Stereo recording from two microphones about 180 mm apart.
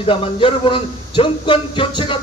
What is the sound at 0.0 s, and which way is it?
A man's voice, 30° left (ahead or behind).